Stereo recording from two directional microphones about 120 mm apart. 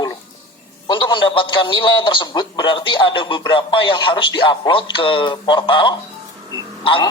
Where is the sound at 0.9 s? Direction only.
40° left (ahead or behind).